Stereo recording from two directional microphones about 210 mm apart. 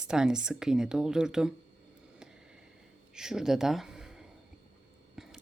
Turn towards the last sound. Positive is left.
turn(degrees=-5)  # may be behind; listen again after turning